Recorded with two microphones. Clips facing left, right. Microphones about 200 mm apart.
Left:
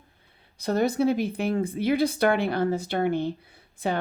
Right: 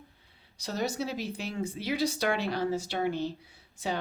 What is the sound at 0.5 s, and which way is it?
Speech, 55° left (ahead or behind).